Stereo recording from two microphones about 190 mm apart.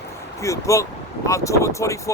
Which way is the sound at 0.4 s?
15° left (ahead or behind).